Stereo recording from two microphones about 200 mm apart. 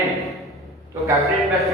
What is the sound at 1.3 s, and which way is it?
Speech, centre (ahead or behind).